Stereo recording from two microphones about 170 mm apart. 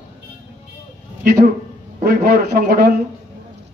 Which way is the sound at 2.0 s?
60° right (ahead or behind).